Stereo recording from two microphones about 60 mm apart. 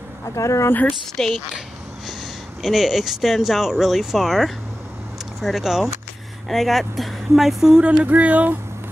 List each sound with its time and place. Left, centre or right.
0.4 s speech: left
1.2 s a woman's voice: centre
2.6 s speech: centre
6.5 s speech: centre
8.0 s speech: right